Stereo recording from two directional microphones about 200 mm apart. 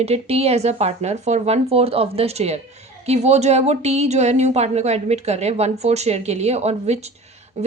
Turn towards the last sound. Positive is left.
turn(degrees=-35)  # may be behind; listen again after turning